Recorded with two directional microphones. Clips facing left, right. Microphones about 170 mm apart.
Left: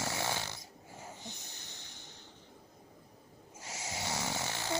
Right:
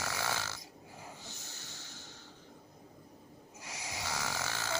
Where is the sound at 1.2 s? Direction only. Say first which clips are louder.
Left 1 dB; 20° left (ahead or behind).